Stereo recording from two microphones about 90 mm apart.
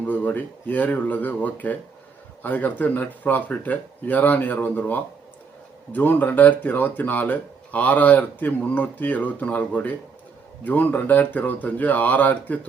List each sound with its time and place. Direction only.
0.1 s speech: 20° left (ahead or behind)